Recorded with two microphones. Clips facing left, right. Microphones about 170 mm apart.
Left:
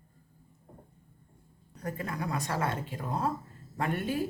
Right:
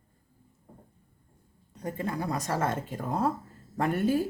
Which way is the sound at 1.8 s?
30° right (ahead or behind).